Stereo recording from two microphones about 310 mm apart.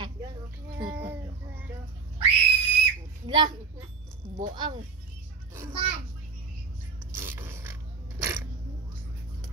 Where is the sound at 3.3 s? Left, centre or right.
Centre.